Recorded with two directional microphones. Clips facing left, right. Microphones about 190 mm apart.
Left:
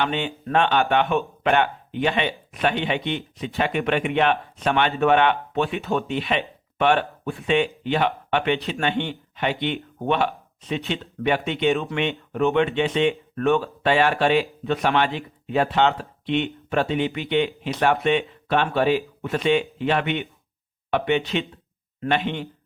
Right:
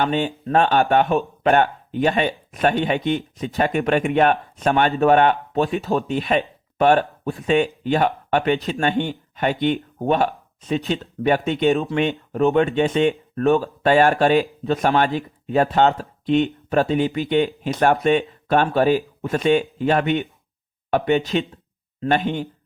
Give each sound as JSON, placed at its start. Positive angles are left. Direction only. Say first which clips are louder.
{"t": 0.0, "sound": "speech", "louder": "right 4 dB", "side_deg": -40}